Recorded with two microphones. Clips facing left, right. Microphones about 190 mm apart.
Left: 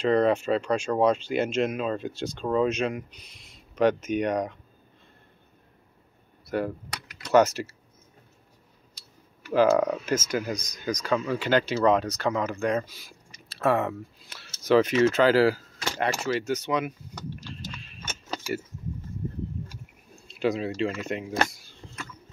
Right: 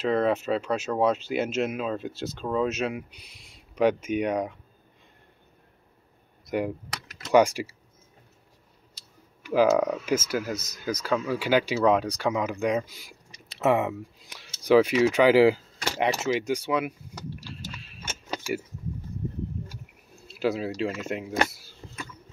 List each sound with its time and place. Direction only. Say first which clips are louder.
0.0 s speech: left 2 dB; 5° right (ahead or behind)
6.4 s a sound: even; 15° right (ahead or behind)
7.3 s speech: even; 10° right (ahead or behind)
9.4 s speech: even; 10° right (ahead or behind)
17.4 s keys jangling: left 1 dB; 5° right (ahead or behind)
20.2 s speech: even; 5° right (ahead or behind)
21.5 s a sound: right 1 dB; 5° right (ahead or behind)